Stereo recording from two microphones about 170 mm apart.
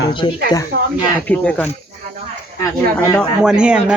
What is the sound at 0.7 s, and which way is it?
Speech, 70° right (ahead or behind).